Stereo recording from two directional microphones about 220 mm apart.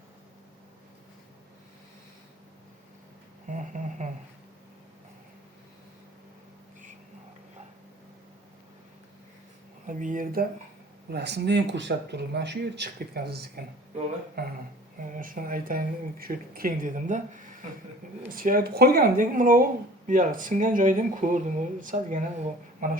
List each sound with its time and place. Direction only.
3.4 s a sound: 35° right (ahead or behind)
9.8 s speech: 35° right (ahead or behind)
11.1 s speech: 50° right (ahead or behind)